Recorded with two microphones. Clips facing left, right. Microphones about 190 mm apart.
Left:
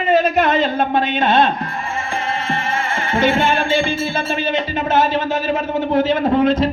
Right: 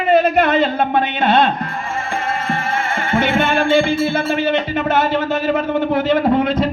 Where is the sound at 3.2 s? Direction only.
60° right (ahead or behind).